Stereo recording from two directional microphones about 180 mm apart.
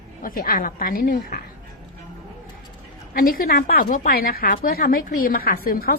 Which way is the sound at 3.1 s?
50° left (ahead or behind).